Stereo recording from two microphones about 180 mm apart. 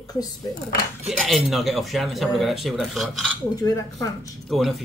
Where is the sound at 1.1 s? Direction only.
Centre (ahead or behind).